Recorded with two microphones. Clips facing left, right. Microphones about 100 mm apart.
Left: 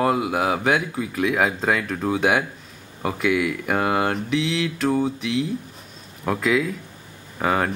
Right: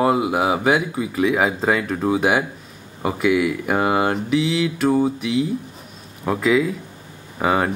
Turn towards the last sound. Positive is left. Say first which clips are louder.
# right 2 dB
turn(degrees=-5)  # may be behind; listen again after turning